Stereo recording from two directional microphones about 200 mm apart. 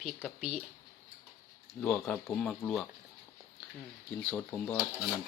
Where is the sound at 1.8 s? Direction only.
10° left (ahead or behind).